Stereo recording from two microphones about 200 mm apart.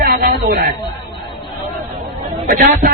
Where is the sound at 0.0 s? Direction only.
50° right (ahead or behind).